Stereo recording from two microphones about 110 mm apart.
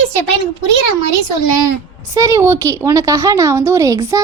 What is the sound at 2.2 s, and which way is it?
A woman's voice, 25° right (ahead or behind).